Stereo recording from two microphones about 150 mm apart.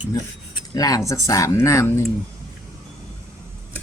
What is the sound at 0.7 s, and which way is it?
Speech, 25° left (ahead or behind).